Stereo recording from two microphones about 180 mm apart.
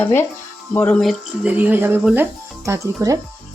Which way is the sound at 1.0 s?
10° right (ahead or behind).